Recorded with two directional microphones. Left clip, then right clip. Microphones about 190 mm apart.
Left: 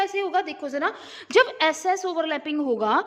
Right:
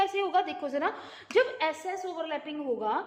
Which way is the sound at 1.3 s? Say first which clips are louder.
Left 7 dB; 55° left (ahead or behind).